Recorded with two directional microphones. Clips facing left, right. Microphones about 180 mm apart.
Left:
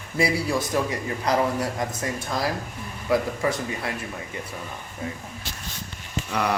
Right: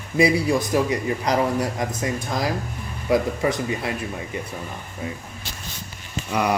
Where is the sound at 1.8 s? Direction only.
20° right (ahead or behind).